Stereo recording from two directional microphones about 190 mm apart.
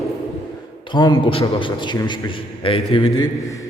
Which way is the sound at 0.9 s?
20° left (ahead or behind).